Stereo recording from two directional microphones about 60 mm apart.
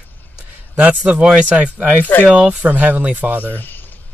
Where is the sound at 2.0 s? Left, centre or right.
Left.